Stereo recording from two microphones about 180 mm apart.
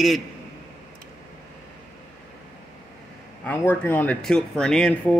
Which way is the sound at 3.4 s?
10° left (ahead or behind).